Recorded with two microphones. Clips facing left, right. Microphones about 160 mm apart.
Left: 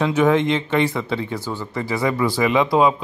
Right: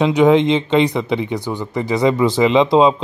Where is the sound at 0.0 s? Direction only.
20° right (ahead or behind).